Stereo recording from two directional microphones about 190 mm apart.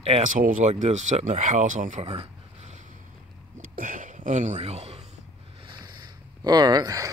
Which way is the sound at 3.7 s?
45° right (ahead or behind).